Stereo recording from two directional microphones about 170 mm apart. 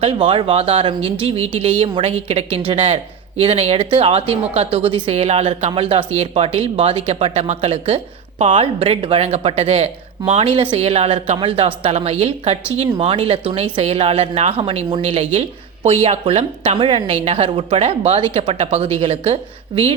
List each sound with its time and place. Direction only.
0.0 s speech: 30° right (ahead or behind)